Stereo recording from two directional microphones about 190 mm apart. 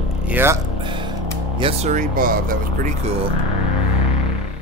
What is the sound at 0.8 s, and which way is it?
Music, 25° right (ahead or behind).